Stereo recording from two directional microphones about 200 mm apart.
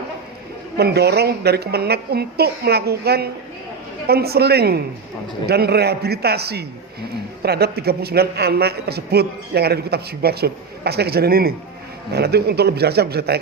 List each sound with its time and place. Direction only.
0.8 s a man's voice: 55° right (ahead or behind)